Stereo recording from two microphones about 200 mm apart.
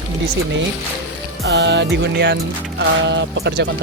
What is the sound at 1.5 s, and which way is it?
Music, 60° right (ahead or behind).